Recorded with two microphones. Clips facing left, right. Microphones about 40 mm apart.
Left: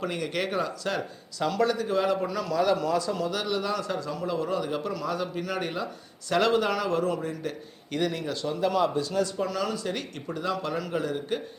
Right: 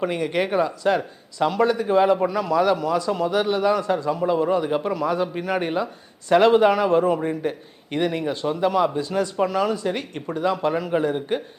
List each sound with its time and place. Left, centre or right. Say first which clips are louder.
0.0 s speech: right 7 dB; right
8.7 s a man's voice: right 4 dB; centre
9.0 s speech: right 5 dB; right